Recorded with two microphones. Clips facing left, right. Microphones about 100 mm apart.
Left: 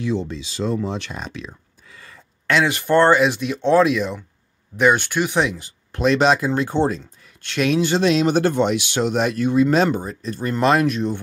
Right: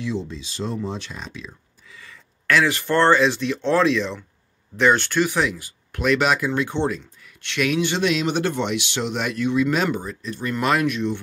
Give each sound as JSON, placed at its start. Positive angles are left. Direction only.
{"t": 0.0, "sound": "speech", "side_deg": 70}
{"t": 1.1, "sound": "speech", "side_deg": 60}
{"t": 2.4, "sound": "speech", "side_deg": 20}